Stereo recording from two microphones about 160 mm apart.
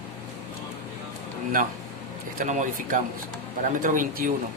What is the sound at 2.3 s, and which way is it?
Speech, 50° right (ahead or behind).